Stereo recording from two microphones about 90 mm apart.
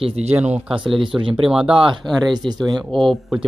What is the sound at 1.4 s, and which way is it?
Speech, 5° right (ahead or behind).